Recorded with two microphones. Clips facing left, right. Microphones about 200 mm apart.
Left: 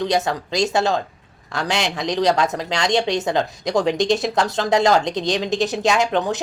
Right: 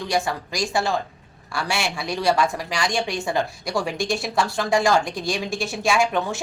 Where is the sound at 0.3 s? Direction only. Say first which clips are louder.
Left 5 dB; 20° left (ahead or behind).